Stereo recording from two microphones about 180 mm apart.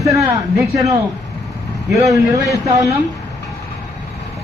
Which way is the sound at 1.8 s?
Centre (ahead or behind).